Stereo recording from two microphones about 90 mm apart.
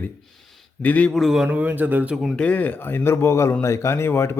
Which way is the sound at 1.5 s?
20° right (ahead or behind).